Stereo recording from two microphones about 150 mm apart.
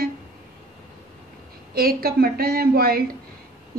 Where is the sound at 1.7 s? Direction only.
85° right.